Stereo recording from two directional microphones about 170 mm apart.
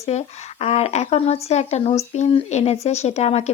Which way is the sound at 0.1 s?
40° left (ahead or behind).